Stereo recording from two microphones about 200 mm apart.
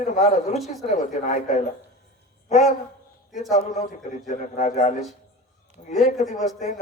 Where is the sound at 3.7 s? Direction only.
40° left (ahead or behind).